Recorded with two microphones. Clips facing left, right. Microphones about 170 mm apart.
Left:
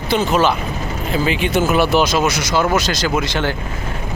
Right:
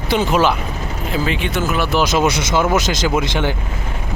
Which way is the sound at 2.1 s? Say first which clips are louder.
Right 1 dB; 25° right (ahead or behind).